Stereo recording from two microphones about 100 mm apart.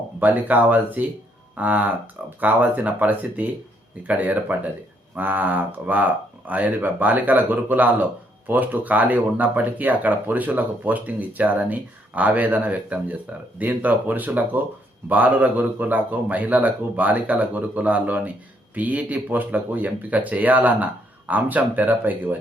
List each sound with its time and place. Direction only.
0.2 s speech: 15° right (ahead or behind)